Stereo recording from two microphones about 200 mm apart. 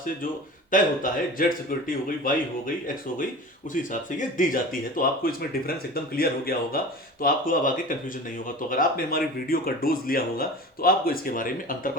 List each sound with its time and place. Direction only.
0.7 s speech: 40° left (ahead or behind)
4.4 s speech: 45° left (ahead or behind)